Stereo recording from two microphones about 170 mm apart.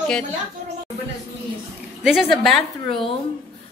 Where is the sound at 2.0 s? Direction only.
Centre (ahead or behind).